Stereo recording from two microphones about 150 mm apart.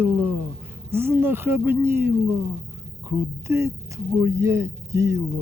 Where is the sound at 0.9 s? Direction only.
15° right (ahead or behind).